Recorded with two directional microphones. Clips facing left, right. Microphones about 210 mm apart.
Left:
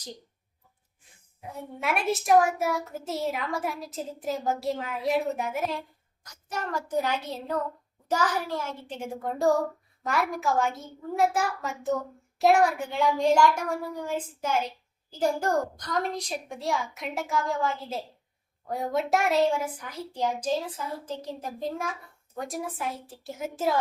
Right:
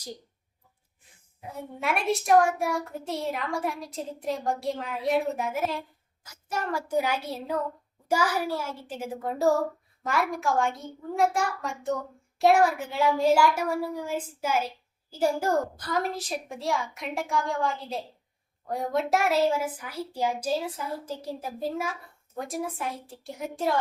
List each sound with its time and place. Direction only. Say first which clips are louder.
1.4 s a child's voice: right 1 dB; centre (ahead or behind)